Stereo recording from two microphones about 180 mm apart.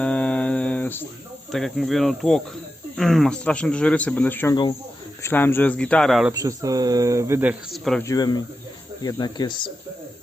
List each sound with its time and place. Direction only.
0.0 s a sound: 5° left (ahead or behind)
1.5 s speech: centre (ahead or behind)
6.3 s speech: 20° right (ahead or behind)
7.7 s speech: centre (ahead or behind)
8.0 s speech: 20° left (ahead or behind)